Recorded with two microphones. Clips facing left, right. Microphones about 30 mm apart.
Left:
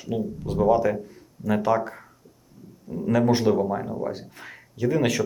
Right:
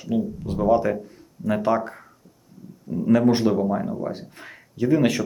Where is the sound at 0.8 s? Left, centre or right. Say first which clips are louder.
Even; centre.